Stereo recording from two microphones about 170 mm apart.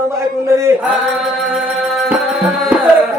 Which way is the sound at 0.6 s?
15° right (ahead or behind).